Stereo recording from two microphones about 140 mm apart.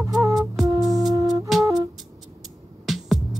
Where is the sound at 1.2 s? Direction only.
25° right (ahead or behind).